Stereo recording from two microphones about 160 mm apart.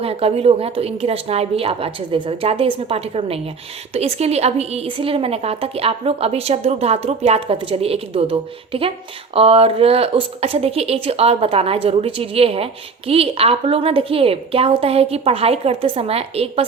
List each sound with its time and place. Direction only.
0.0 s a woman's voice: 40° right (ahead or behind)